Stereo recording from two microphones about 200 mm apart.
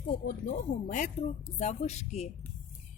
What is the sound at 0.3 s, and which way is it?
Speech, 40° left (ahead or behind).